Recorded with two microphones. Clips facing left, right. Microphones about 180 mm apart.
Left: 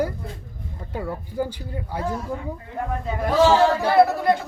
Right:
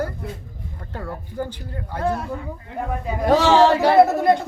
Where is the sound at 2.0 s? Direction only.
70° right (ahead or behind).